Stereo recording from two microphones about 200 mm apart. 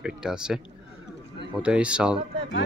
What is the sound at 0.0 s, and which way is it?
Speech, 5° right (ahead or behind).